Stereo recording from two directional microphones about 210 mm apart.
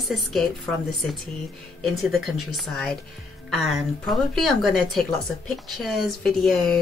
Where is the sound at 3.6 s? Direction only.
Centre (ahead or behind).